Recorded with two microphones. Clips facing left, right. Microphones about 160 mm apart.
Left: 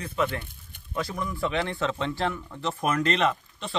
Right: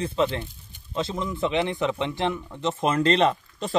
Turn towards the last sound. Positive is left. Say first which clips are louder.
# right 3 dB
turn(degrees=-35)  # may be behind; listen again after turning